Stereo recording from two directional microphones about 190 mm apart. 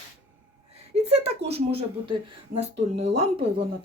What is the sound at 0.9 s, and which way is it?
Speech, 30° right (ahead or behind).